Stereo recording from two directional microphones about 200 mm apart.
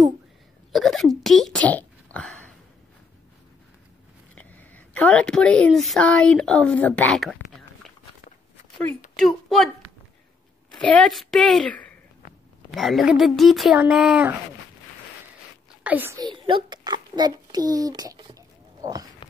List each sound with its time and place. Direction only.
0.7 s speech: centre (ahead or behind)
2.1 s a sound: 5° left (ahead or behind)
4.4 s speech: 10° left (ahead or behind)
9.2 s speech: centre (ahead or behind)
10.7 s a woman's voice: 5° left (ahead or behind)
15.8 s a child's voice: 10° right (ahead or behind)